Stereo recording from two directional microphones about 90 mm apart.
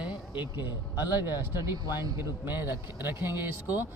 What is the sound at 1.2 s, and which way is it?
Speech, 25° right (ahead or behind).